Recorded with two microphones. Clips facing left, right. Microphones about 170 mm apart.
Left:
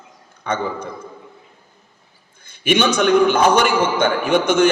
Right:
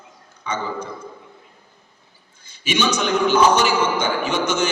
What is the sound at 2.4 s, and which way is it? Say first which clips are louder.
A man's voice: left 5 dB; 55° left (ahead or behind).